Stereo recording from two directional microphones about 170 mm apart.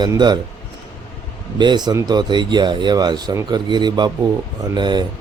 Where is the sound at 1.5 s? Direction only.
25° right (ahead or behind).